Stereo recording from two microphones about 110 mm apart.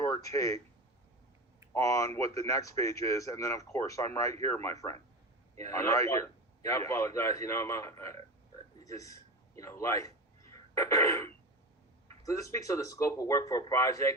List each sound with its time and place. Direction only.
0.0 s speech: 30° left (ahead or behind)
1.7 s a man's voice: 30° left (ahead or behind)
10.5 s a sound: 30° left (ahead or behind)
12.2 s speech: 30° left (ahead or behind)